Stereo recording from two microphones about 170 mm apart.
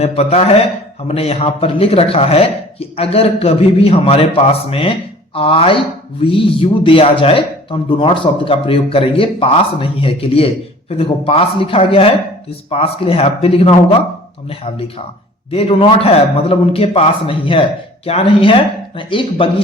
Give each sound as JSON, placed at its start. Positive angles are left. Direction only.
{"t": 0.0, "sound": "speech", "side_deg": 40}
{"t": 15.5, "sound": "speech", "side_deg": 35}